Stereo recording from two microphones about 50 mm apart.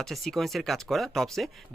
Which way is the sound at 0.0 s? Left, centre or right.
Centre.